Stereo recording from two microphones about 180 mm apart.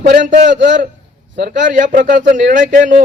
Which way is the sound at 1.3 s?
75° right (ahead or behind).